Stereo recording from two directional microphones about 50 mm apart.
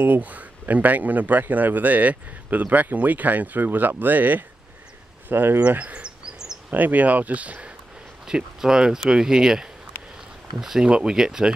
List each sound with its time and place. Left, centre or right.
0.0 s a man's voice: right
5.7 s a man's voice: right
6.0 s a sound: centre
6.7 s a man's voice: right
8.3 s speech: centre
10.1 s a sound: centre
10.9 s speech: centre